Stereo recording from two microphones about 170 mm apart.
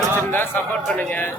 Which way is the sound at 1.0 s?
10° left (ahead or behind).